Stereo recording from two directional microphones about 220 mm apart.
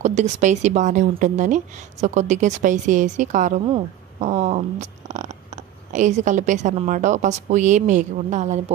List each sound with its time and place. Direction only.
0.0 s speech: 30° right (ahead or behind)